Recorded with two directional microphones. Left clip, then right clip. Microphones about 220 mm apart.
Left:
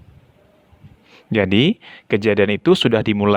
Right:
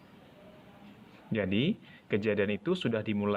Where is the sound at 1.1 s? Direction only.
45° left (ahead or behind).